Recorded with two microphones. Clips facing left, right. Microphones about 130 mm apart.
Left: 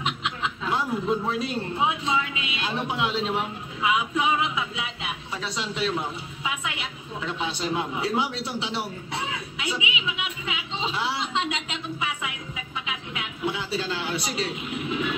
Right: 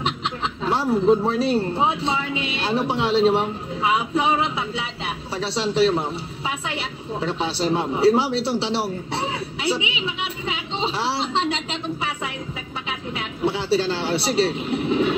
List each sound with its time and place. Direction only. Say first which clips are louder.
0.0 s speech: right 3 dB; 30° right (ahead or behind)